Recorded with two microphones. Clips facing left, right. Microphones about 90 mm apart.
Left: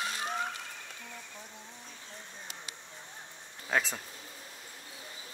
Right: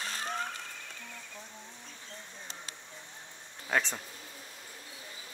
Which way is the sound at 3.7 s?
5° left (ahead or behind).